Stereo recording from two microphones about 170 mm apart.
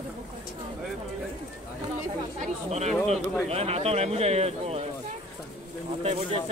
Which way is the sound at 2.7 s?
40° right (ahead or behind).